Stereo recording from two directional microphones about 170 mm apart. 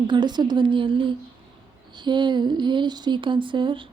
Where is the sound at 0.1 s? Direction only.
25° right (ahead or behind).